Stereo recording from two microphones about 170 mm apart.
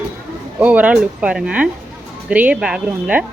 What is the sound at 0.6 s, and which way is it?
Speech, 10° right (ahead or behind).